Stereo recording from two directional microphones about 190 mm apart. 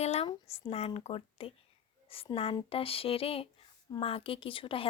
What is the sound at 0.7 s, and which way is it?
Speech, 30° left (ahead or behind).